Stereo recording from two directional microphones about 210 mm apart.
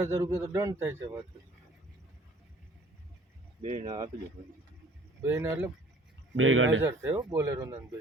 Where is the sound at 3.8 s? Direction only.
20° right (ahead or behind).